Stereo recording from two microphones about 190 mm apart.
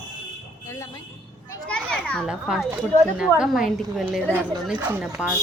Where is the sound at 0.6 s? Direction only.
15° left (ahead or behind).